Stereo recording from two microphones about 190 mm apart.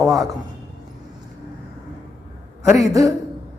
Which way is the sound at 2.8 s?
15° right (ahead or behind).